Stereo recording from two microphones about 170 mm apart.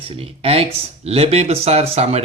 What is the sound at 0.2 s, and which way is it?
Speech, 35° right (ahead or behind).